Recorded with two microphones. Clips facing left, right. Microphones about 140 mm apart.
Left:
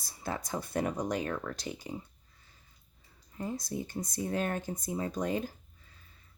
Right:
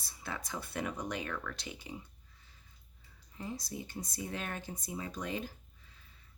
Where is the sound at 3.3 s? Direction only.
50° left (ahead or behind).